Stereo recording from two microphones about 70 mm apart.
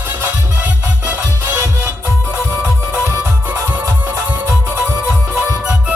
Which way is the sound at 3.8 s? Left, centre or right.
Right.